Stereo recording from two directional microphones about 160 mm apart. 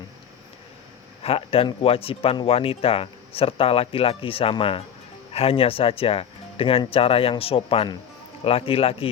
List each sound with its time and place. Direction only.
1.2 s speech: 35° left (ahead or behind)